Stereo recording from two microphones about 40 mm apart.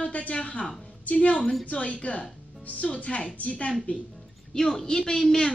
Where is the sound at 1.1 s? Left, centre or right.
Left.